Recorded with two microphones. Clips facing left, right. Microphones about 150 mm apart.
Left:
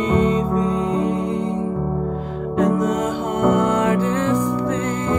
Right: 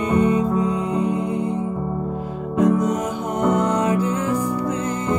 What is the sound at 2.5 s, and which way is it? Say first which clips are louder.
Music: right 1 dB; 75° left (ahead or behind).